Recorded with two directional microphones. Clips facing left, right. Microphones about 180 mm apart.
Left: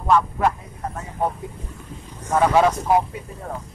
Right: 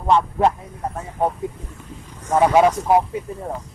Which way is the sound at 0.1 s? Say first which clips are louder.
Right 2 dB; 25° right (ahead or behind).